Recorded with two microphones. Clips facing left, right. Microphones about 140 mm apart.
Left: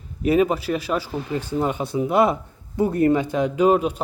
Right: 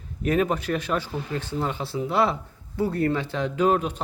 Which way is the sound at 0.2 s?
5° left (ahead or behind).